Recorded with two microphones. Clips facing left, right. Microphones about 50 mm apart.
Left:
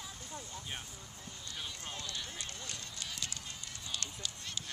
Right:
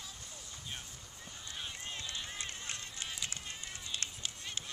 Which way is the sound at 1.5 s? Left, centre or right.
Right.